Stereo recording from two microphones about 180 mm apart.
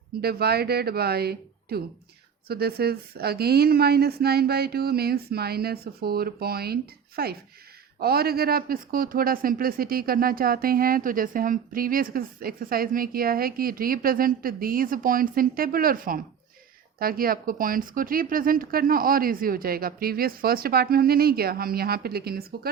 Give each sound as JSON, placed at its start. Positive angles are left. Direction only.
{"t": 0.2, "sound": "a man's voice", "side_deg": -60}